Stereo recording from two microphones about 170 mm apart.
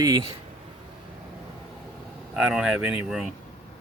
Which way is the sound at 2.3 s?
5° right (ahead or behind).